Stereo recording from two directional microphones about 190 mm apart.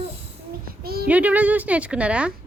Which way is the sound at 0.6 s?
55° right (ahead or behind).